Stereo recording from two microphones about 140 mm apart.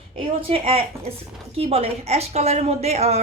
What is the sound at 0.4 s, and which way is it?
A woman's voice, 45° right (ahead or behind).